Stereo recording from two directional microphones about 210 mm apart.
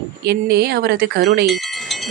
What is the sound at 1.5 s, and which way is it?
Wind chime, centre (ahead or behind).